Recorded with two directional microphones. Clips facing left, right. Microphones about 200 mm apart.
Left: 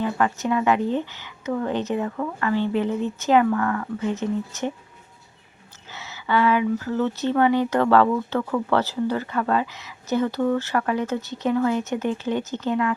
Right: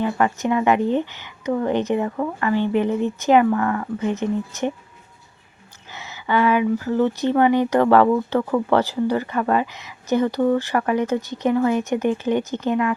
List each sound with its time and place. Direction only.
0.0 s speech: 15° right (ahead or behind)
5.9 s speech: 15° right (ahead or behind)